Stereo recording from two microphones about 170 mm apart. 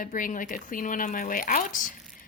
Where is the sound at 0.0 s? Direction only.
55° left (ahead or behind).